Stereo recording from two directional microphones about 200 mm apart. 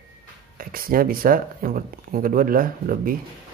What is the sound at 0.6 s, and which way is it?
Speech, 45° right (ahead or behind).